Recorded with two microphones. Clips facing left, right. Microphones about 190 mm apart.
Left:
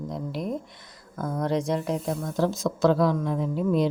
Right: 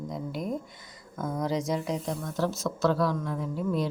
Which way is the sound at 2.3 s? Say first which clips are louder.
Left 4 dB; 15° left (ahead or behind).